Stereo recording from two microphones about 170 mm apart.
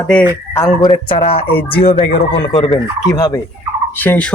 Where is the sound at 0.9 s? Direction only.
30° left (ahead or behind).